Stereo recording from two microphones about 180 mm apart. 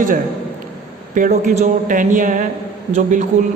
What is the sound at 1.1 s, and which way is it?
A man's voice, 45° right (ahead or behind).